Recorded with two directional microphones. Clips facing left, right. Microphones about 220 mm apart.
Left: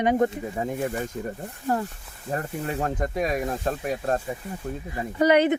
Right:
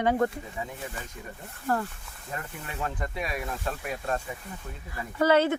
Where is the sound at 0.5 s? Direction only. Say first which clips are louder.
Left 10 dB; 45° left (ahead or behind).